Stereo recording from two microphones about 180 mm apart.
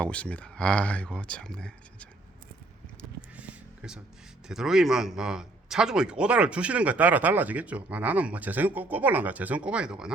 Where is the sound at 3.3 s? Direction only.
5° right (ahead or behind).